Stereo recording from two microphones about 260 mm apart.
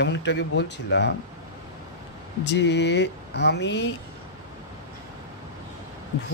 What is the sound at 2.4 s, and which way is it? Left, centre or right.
Speech, left.